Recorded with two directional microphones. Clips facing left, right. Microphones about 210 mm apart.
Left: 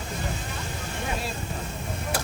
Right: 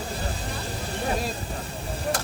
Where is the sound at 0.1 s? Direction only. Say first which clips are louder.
Right 1 dB; 35° right (ahead or behind).